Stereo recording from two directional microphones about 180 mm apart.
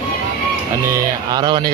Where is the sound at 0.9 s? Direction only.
20° right (ahead or behind).